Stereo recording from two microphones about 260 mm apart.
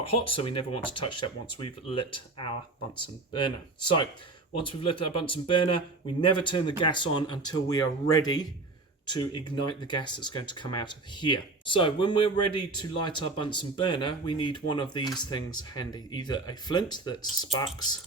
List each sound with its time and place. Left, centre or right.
0.1 s speech: left